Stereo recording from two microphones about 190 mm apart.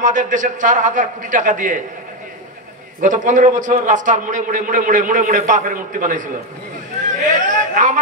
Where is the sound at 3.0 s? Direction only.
40° right (ahead or behind).